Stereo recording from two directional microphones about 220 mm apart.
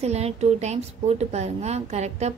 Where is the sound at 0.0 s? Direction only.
30° right (ahead or behind).